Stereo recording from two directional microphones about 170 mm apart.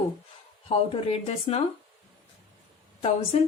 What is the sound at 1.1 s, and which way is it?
Speech, 35° left (ahead or behind).